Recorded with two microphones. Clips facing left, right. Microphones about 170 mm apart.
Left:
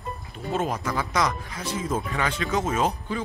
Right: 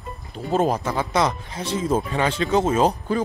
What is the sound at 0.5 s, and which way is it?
Speech, 35° right (ahead or behind).